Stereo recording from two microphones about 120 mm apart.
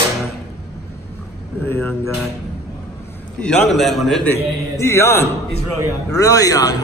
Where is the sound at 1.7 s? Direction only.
20° left (ahead or behind).